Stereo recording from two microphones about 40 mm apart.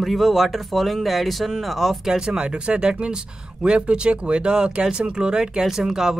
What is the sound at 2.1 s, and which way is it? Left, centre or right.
Speech, right.